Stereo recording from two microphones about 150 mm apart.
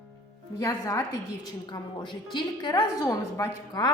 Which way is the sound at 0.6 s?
20° left (ahead or behind).